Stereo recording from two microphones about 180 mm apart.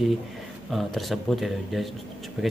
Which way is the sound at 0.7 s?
Centre (ahead or behind).